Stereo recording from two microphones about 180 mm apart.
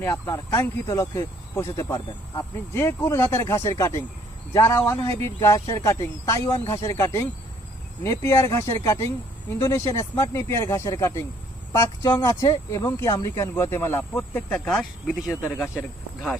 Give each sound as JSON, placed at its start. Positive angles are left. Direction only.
{"t": 0.0, "sound": "speech", "side_deg": 15}
{"t": 15.3, "sound": "speech", "side_deg": 15}
{"t": 15.5, "sound": "speech", "side_deg": -5}